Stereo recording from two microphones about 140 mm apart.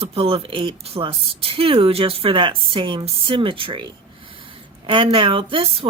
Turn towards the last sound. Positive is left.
turn(degrees=-40)  # may be behind; listen again after turning